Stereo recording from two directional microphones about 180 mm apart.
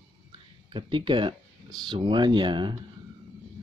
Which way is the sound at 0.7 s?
25° right (ahead or behind).